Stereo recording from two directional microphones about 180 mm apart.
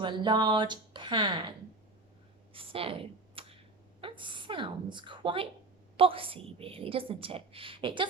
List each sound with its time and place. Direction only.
0.0 s speech: 25° right (ahead or behind)
2.5 s a sound: 30° right (ahead or behind)
4.0 s a woman's voice: 25° right (ahead or behind)